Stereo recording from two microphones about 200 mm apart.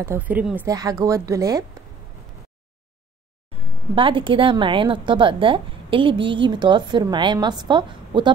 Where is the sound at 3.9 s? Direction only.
25° right (ahead or behind).